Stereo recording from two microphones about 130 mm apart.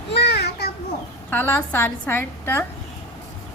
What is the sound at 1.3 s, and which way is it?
A woman's voice, 15° left (ahead or behind).